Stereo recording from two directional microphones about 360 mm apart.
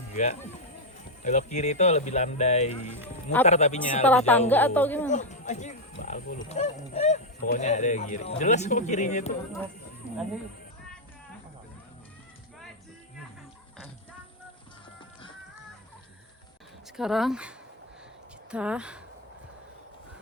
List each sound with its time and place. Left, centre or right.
0.1 s speech: centre
4.0 s a woman's voice: centre
5.0 s speech: centre
17.0 s a woman's voice: centre
18.5 s a woman's voice: centre